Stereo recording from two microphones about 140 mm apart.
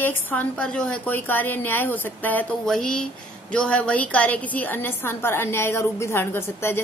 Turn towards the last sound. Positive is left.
turn(degrees=15)  # may be behind; listen again after turning